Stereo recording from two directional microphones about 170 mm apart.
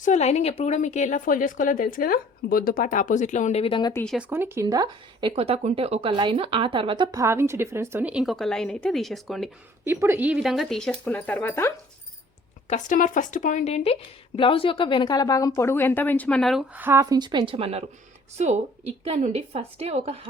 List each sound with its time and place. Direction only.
0.0 s speech: 45° left (ahead or behind)
4.0 s speech: centre (ahead or behind)
4.3 s a woman's voice: 15° right (ahead or behind)
5.3 s a woman's voice: 35° right (ahead or behind); by 9.5 s centre (ahead or behind)
9.8 s a woman's voice: 15° right (ahead or behind); by 11.7 s 10° left (ahead or behind)
12.6 s speech: 45° left (ahead or behind); by 16.6 s centre (ahead or behind)
16.7 s a woman's voice: 15° right (ahead or behind); by 20.2 s 35° right (ahead or behind)